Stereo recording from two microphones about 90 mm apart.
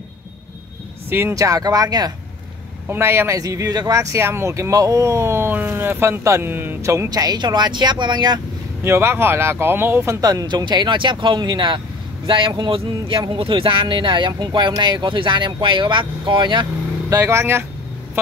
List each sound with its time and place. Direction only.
1.3 s speech: 40° right (ahead or behind)
2.9 s speech: 25° right (ahead or behind)
3.3 s speech: 40° right (ahead or behind)
7.1 s speech: 45° right (ahead or behind)
8.8 s speech: 30° right (ahead or behind)
10.2 s speech: 45° right (ahead or behind)
17.1 s speech: 35° right (ahead or behind)